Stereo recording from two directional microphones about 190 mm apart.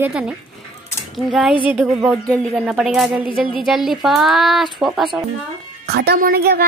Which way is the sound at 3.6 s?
Centre (ahead or behind).